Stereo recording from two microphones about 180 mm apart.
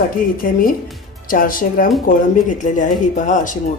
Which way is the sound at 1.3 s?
50° left (ahead or behind).